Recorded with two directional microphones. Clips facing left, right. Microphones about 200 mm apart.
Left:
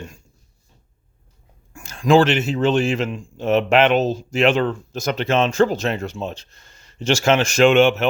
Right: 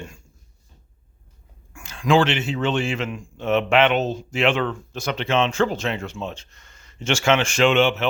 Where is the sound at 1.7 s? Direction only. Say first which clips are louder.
Left 4 dB; 40° left (ahead or behind).